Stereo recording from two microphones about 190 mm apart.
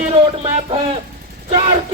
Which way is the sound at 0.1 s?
30° right (ahead or behind).